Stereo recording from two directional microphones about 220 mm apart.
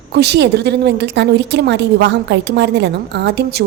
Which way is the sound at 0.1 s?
50° right (ahead or behind).